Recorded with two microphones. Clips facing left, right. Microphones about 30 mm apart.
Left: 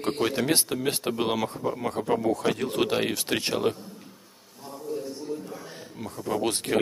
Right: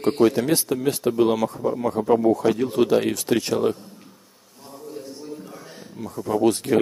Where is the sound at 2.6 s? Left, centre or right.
Left.